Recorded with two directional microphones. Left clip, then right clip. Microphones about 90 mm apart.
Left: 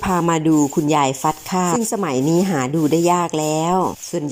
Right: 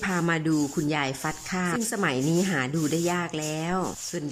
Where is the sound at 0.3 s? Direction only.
35° left (ahead or behind).